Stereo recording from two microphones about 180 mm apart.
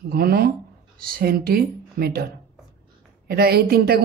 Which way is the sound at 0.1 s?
60° right (ahead or behind).